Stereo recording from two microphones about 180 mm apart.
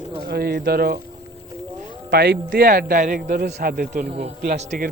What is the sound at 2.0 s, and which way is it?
A man's voice, 65° right (ahead or behind).